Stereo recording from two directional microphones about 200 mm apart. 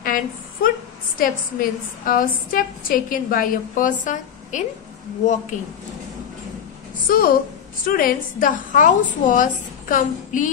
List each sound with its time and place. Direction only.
0.0 s a sound: 45° left (ahead or behind)
1.1 s a woman's voice: 45° left (ahead or behind)
7.1 s a woman's voice: 45° left (ahead or behind)